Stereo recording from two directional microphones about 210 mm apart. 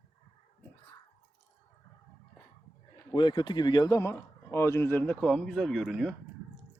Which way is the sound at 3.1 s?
20° left (ahead or behind).